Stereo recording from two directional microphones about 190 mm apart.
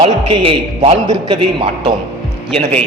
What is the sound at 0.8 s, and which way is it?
A man's voice, 25° right (ahead or behind).